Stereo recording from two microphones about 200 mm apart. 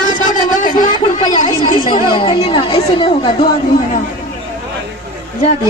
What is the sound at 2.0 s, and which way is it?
Speech, 25° left (ahead or behind).